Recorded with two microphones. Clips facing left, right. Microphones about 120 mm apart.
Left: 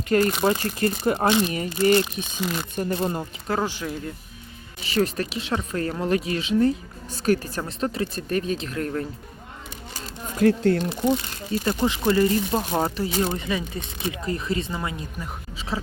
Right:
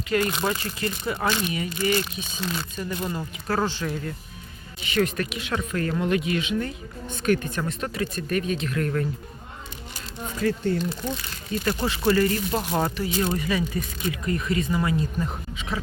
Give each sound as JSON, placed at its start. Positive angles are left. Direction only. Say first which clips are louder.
{"t": 0.1, "sound": "speech", "louder": "left 4 dB", "side_deg": 40}
{"t": 1.1, "sound": "speech", "louder": "left 4 dB", "side_deg": 20}
{"t": 1.5, "sound": "speech", "louder": "left 5 dB", "side_deg": 35}
{"t": 2.4, "sound": "speech", "louder": "left 2 dB", "side_deg": 15}
{"t": 2.9, "sound": "speech", "louder": "left 4 dB", "side_deg": 35}
{"t": 3.4, "sound": "speech", "louder": "right 1 dB", "side_deg": 15}
{"t": 4.9, "sound": "speech", "louder": "left 1 dB", "side_deg": 30}
{"t": 10.4, "sound": "speech", "louder": "left 6 dB", "side_deg": 65}
{"t": 11.7, "sound": "speech", "louder": "left 1 dB", "side_deg": 15}
{"t": 13.0, "sound": "speech", "louder": "left 1 dB", "side_deg": 30}
{"t": 14.8, "sound": "speech", "louder": "right 6 dB", "side_deg": 15}
{"t": 15.7, "sound": "speech", "louder": "left 1 dB", "side_deg": 30}